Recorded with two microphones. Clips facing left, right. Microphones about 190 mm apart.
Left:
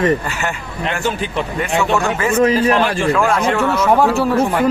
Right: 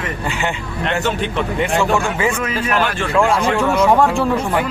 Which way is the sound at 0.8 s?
Centre (ahead or behind).